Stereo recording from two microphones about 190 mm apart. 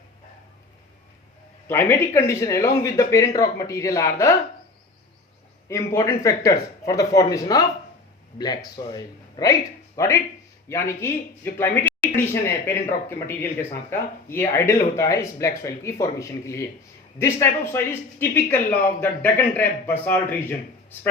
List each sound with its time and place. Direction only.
1.6 s speech: 10° left (ahead or behind)
5.6 s speech: 15° left (ahead or behind)